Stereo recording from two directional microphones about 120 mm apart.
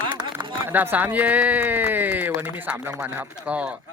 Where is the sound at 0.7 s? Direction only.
15° right (ahead or behind).